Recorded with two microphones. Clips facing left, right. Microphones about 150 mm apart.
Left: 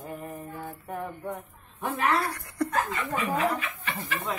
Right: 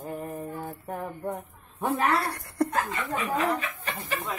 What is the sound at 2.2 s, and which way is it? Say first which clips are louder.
Speech: right 2 dB; 65° right (ahead or behind).